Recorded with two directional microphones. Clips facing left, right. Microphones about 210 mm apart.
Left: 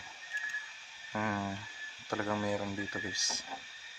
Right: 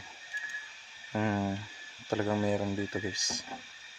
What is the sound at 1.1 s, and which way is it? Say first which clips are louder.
Speech: right 5 dB; 30° right (ahead or behind).